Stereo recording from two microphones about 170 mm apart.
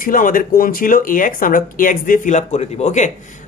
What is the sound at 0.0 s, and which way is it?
Speech, 55° left (ahead or behind).